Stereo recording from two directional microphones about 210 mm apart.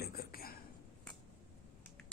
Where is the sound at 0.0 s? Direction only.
45° left (ahead or behind).